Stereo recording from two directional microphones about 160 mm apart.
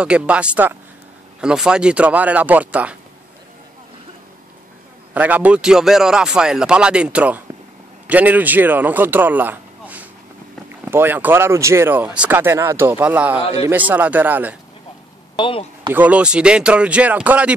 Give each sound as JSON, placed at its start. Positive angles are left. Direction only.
{"t": 0.0, "sound": "speech", "side_deg": -5}
{"t": 5.1, "sound": "a man's voice", "side_deg": -10}
{"t": 15.3, "sound": "speech", "side_deg": 30}
{"t": 15.9, "sound": "speech", "side_deg": -10}